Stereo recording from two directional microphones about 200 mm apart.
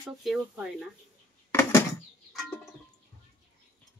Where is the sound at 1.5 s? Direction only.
15° left (ahead or behind).